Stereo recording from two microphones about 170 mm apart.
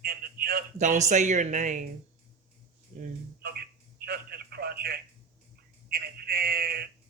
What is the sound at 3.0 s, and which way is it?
Speech, 65° right (ahead or behind).